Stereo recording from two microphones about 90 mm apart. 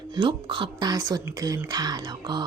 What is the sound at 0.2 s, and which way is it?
Speech, 60° right (ahead or behind).